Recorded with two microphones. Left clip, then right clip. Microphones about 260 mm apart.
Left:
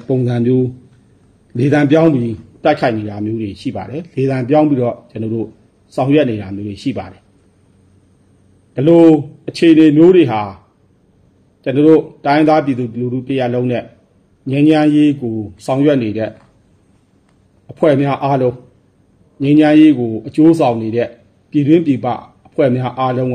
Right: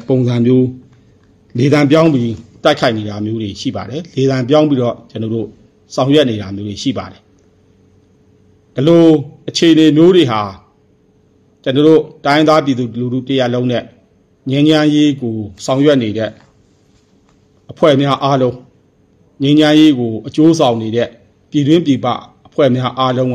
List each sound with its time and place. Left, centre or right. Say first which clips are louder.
0.1 s a man's voice: right 2 dB; right
8.7 s a man's voice: even; right
11.6 s a man's voice: right 1 dB; right
17.6 s a man's voice: right 2 dB; right